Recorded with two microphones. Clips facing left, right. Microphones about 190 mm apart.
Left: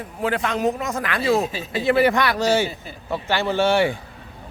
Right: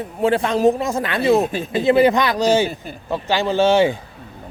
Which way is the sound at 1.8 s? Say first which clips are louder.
Right 3 dB; 20° right (ahead or behind).